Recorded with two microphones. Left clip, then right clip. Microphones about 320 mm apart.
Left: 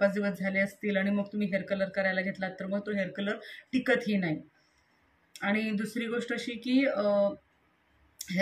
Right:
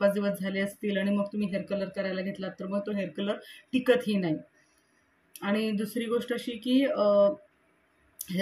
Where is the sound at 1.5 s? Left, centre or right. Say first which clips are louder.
Left 2 dB; right.